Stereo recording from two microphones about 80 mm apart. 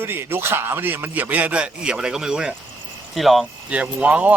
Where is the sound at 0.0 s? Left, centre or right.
Right; by 3.4 s centre.